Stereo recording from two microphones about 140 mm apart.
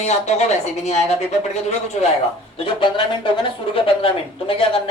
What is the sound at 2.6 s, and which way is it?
Speech, 35° left (ahead or behind).